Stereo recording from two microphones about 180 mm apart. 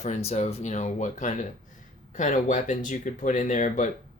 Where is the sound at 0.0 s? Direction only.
40° left (ahead or behind).